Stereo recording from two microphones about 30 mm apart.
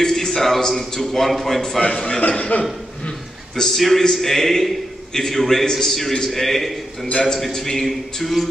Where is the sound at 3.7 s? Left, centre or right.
Centre.